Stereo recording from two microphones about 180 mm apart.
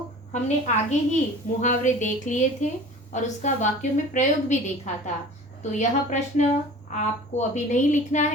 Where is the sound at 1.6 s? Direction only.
45° left (ahead or behind).